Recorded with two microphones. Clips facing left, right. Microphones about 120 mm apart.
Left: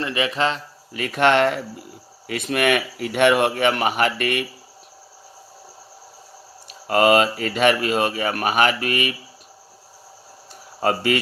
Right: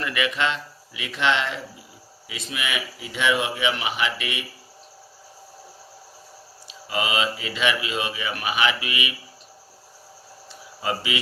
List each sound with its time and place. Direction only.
0.0 s speech: 30° left (ahead or behind); by 4.4 s 55° left (ahead or behind)
6.7 s speech: 55° left (ahead or behind)
10.8 s speech: 50° left (ahead or behind)